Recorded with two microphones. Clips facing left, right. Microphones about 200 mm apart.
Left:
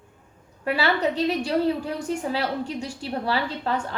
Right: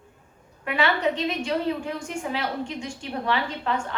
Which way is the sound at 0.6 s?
35° left (ahead or behind).